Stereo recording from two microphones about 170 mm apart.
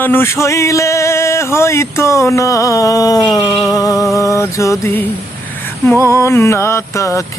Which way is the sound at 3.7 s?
20° left (ahead or behind).